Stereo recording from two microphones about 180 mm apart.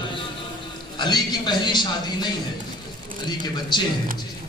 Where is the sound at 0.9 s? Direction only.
25° left (ahead or behind).